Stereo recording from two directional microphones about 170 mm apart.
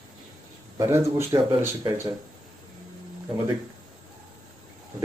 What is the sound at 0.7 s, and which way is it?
Speech, 15° right (ahead or behind).